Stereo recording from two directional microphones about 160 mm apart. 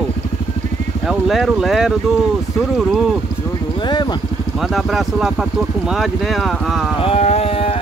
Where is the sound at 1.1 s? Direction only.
Centre (ahead or behind).